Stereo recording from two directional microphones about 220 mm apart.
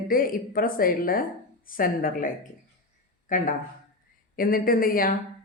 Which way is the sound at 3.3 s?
35° left (ahead or behind).